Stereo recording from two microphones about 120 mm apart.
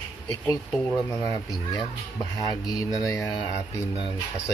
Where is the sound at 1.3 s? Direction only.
30° left (ahead or behind).